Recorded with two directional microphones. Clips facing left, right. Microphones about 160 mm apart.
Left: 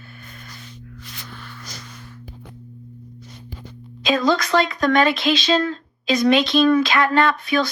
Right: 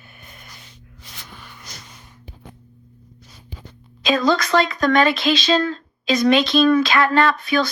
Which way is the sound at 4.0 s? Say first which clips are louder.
Right 1 dB; centre (ahead or behind).